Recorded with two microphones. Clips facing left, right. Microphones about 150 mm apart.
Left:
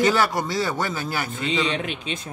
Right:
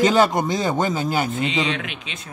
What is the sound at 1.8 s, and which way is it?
Speech, 35° left (ahead or behind).